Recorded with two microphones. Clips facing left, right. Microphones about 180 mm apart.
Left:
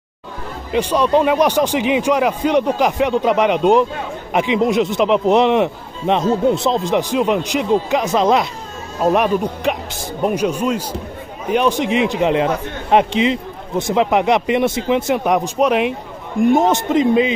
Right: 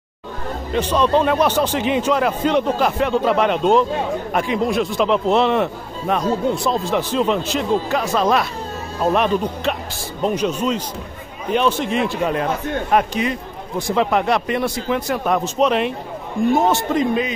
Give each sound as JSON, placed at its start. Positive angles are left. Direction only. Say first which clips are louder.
{"t": 0.7, "sound": "a man's voice", "louder": "left 2 dB", "side_deg": 10}